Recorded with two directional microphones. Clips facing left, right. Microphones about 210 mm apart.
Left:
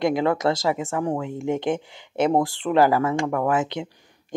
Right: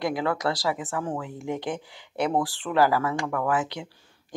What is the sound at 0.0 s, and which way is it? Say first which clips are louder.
Speech: left 5 dB; 20° left (ahead or behind).